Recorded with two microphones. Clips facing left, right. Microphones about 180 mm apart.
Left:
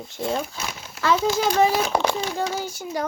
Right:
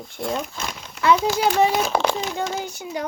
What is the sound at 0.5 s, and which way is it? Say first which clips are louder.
Speech: right 1 dB; 5° left (ahead or behind).